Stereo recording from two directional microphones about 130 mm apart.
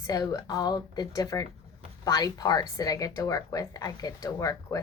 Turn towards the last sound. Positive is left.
turn(degrees=25)  # may be behind; listen again after turning